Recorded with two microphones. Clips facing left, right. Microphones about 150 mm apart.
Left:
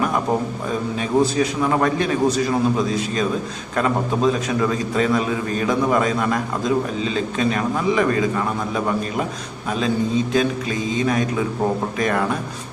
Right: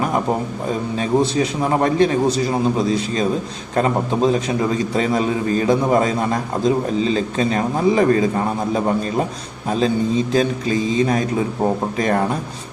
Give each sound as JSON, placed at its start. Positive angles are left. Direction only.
{"t": 0.9, "sound": "a man's voice", "side_deg": -25}
{"t": 9.6, "sound": "a man's voice", "side_deg": -35}